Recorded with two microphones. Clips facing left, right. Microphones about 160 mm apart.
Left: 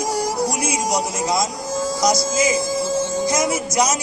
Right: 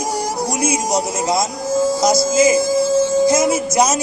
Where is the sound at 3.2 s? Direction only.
25° right (ahead or behind).